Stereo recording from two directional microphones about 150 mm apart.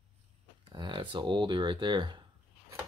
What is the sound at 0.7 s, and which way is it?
Speech, 30° right (ahead or behind).